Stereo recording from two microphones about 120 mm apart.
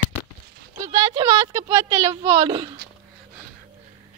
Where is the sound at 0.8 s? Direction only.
35° right (ahead or behind).